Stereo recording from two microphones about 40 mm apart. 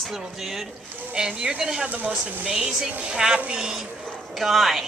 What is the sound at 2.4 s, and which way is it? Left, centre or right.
A woman's voice, right.